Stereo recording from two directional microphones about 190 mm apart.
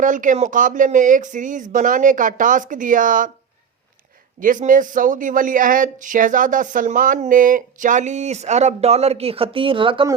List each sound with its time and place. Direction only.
0.0 s speech: 45° right (ahead or behind)
4.4 s speech: 45° right (ahead or behind); by 10.1 s 25° right (ahead or behind)